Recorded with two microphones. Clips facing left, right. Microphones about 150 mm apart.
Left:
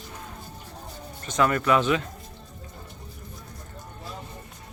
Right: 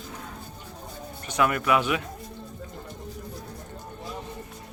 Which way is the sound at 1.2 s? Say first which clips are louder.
Left 1 dB; 10° right (ahead or behind).